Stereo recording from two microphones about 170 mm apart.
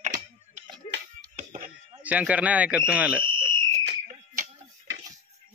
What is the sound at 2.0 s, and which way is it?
A man's voice, 10° right (ahead or behind).